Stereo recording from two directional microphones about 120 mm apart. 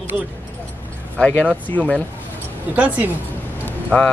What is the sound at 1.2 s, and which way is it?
Speech, 10° left (ahead or behind).